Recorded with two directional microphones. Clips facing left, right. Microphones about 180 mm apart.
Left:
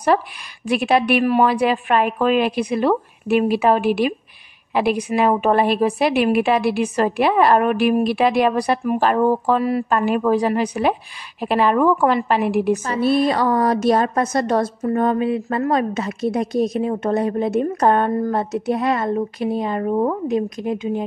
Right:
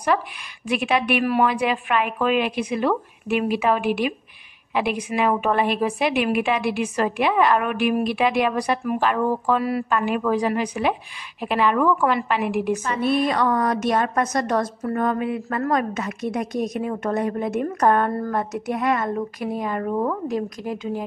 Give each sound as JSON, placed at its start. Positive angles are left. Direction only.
{"t": 0.7, "sound": "a woman's voice", "side_deg": 35}